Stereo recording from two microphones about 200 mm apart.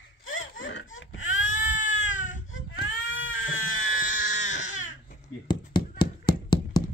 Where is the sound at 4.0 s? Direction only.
40° left (ahead or behind).